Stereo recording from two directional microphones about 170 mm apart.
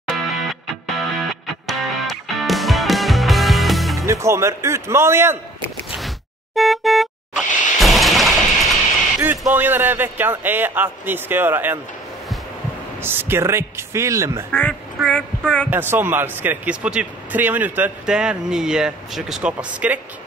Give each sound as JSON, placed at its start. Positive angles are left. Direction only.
{"t": 0.0, "sound": "music", "side_deg": 5}
{"t": 4.0, "sound": "speech", "side_deg": -15}
{"t": 5.9, "sound": "vehicle horn", "side_deg": 0}
{"t": 9.4, "sound": "speech", "side_deg": -10}
{"t": 13.0, "sound": "speech", "side_deg": -15}
{"t": 14.5, "sound": "speech", "side_deg": 10}
{"t": 15.0, "sound": "child singing", "side_deg": 5}
{"t": 15.7, "sound": "speech", "side_deg": -10}